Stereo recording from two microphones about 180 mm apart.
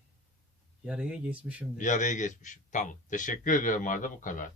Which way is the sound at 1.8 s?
45° left (ahead or behind).